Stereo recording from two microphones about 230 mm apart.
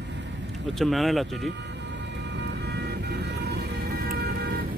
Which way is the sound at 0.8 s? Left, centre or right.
Centre.